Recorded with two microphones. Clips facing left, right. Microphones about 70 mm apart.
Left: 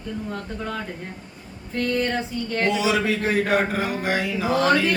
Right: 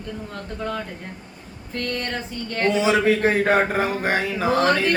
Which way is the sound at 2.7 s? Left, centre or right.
Right.